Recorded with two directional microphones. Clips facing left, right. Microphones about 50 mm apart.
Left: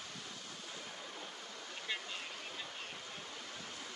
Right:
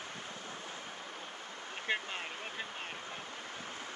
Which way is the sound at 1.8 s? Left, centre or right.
Right.